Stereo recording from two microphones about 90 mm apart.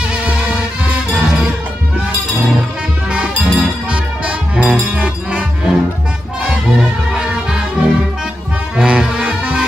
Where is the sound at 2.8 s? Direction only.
10° right (ahead or behind).